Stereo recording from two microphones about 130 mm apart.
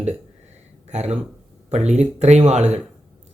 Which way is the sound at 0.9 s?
60° right (ahead or behind).